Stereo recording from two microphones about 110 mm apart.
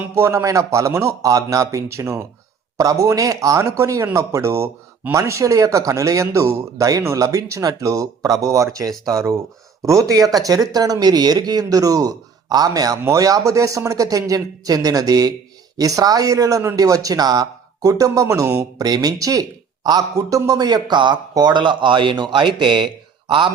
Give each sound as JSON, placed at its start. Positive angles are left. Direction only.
{"t": 0.0, "sound": "speech", "side_deg": -25}